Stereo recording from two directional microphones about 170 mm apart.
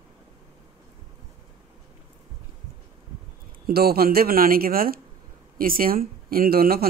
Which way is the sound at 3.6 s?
65° right (ahead or behind).